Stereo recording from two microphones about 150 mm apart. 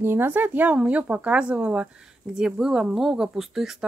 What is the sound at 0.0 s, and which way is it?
Speech, 15° right (ahead or behind).